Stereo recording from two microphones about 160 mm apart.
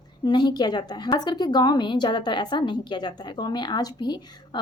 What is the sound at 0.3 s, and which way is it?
A woman's voice, 30° left (ahead or behind).